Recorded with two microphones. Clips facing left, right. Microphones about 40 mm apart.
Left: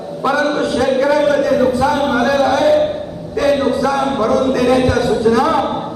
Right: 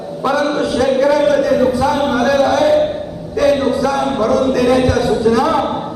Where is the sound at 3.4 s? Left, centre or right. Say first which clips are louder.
Right 1 dB; centre.